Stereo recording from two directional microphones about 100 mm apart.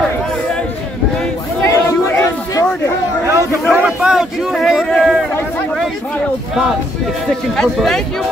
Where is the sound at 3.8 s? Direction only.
10° right (ahead or behind).